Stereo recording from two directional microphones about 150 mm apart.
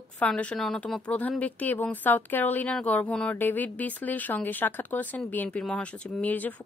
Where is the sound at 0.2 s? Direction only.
10° left (ahead or behind).